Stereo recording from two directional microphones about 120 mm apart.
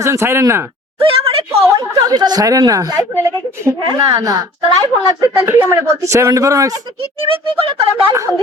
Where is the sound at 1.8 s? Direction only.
35° right (ahead or behind).